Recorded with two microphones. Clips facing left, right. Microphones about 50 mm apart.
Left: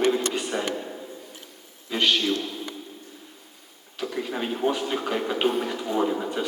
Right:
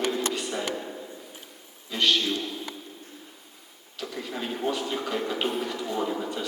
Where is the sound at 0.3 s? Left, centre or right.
Left.